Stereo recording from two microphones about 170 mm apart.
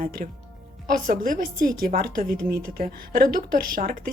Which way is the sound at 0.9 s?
55° right (ahead or behind).